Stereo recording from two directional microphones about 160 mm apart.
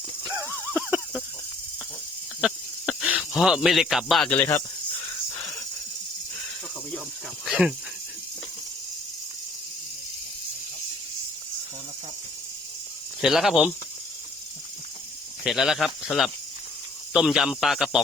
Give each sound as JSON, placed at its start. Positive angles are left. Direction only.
{"t": 0.3, "sound": "horse", "side_deg": -15}
{"t": 0.8, "sound": "a sound", "side_deg": -10}
{"t": 2.4, "sound": "a sound", "side_deg": -5}
{"t": 7.4, "sound": "speech", "side_deg": -5}
{"t": 13.2, "sound": "speech", "side_deg": 0}
{"t": 15.4, "sound": "speech", "side_deg": 0}